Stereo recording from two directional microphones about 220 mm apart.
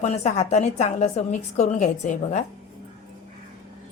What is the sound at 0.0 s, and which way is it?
A woman's voice, 30° left (ahead or behind).